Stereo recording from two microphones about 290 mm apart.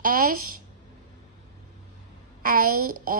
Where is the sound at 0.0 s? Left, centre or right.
Right.